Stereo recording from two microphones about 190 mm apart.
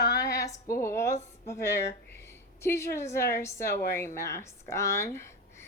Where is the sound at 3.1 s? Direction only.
55° left (ahead or behind).